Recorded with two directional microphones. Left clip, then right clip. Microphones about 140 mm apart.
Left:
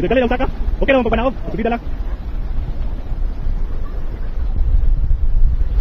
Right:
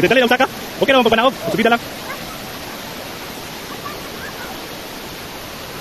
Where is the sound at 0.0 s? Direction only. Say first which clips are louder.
Right 4 dB; 40° right (ahead or behind).